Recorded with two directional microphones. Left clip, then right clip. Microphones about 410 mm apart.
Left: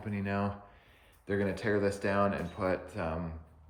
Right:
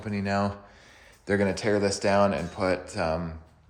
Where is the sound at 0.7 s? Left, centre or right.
Right.